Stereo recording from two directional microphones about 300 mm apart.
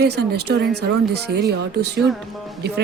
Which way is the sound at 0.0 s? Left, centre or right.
Right.